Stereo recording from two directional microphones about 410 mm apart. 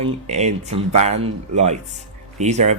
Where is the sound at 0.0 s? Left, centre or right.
Centre.